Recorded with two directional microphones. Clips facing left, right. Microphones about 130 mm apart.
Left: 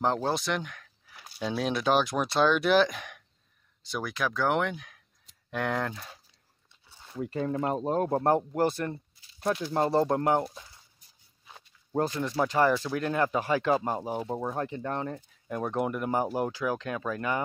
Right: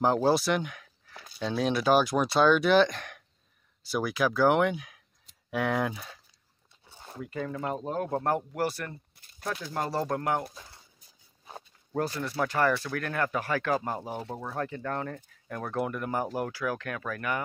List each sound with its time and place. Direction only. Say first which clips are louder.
0.0 s speech: right 4 dB; 5° right (ahead or behind)
1.0 s speech: even; 5° left (ahead or behind); by 6.0 s 10° right (ahead or behind)
7.2 s speech: left 4 dB; 30° left (ahead or behind)
9.1 s a sound: right 2 dB; 55° right (ahead or behind)
9.4 s speech: left 6 dB; 25° left (ahead or behind)
11.9 s speech: left 2 dB; 20° left (ahead or behind)